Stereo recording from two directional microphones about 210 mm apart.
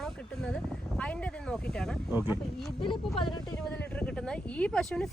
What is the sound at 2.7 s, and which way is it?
Speech, 25° left (ahead or behind).